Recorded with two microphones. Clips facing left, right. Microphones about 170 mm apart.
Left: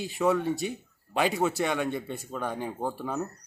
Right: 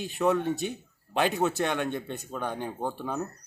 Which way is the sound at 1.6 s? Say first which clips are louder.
Even; 5° left (ahead or behind).